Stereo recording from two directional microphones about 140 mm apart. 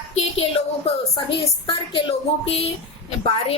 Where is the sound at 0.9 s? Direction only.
40° left (ahead or behind).